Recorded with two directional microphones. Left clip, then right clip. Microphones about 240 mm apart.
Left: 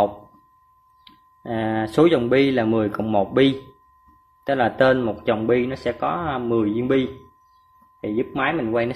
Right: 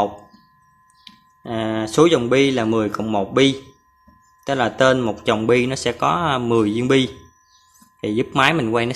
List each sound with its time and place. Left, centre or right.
1.0 s speech: centre